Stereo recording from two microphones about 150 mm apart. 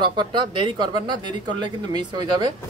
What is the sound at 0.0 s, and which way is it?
Speech, 30° right (ahead or behind).